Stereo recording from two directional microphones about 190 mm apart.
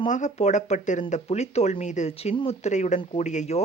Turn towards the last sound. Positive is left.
turn(degrees=35)  # may be behind; listen again after turning